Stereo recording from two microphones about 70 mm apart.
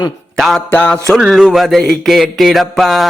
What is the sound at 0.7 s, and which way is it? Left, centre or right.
Music, centre.